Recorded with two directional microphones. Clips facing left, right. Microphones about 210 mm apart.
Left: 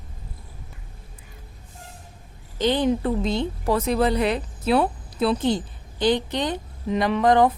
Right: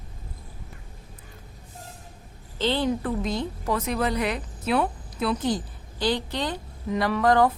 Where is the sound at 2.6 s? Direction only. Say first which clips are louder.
Left 4 dB; 15° left (ahead or behind).